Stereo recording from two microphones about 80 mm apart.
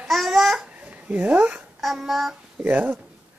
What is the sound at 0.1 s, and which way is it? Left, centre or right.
Babbling, centre.